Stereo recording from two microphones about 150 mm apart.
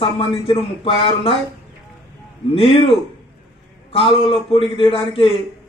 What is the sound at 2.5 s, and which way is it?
A man's voice, 40° left (ahead or behind).